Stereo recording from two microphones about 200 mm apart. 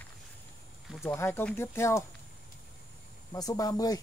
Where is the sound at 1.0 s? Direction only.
10° left (ahead or behind).